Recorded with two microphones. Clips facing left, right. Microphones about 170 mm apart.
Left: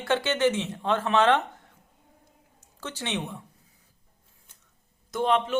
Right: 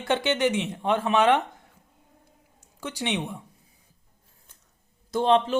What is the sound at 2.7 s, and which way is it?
Speech, 15° right (ahead or behind).